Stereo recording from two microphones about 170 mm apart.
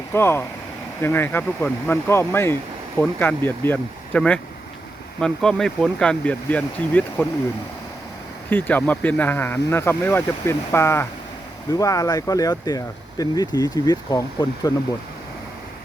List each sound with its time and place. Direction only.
0.1 s speech: 15° left (ahead or behind)
8.4 s speech: 10° left (ahead or behind)